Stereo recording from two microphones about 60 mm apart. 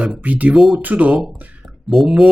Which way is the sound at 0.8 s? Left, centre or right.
Right.